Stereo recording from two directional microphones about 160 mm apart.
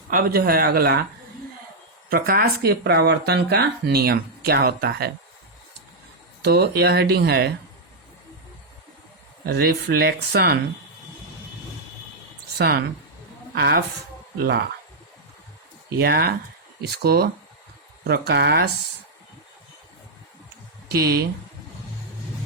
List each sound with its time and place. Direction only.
0.1 s speech: 70° right (ahead or behind)
2.0 s speech: 65° right (ahead or behind); by 5.1 s 85° right
6.4 s speech: 90° right
9.5 s speech: 85° right
12.5 s a woman's voice: 85° right
16.0 s speech: 75° right (ahead or behind)
18.0 s speech: 90° right
20.9 s speech: 75° right (ahead or behind)